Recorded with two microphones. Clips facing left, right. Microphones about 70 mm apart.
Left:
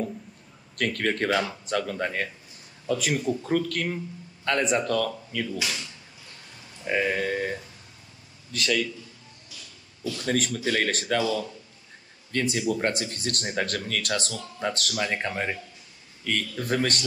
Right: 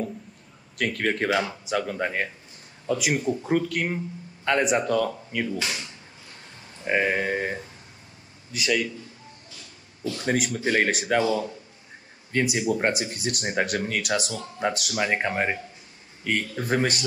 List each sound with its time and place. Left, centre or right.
0.7 s speech: centre
10.0 s speech: right
10.9 s speech: centre
11.1 s speech: right
14.0 s speech: centre
14.3 s speech: right
14.7 s speech: centre
15.0 s speech: right